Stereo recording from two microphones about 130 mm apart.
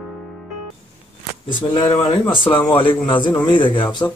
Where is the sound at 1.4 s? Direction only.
40° left (ahead or behind).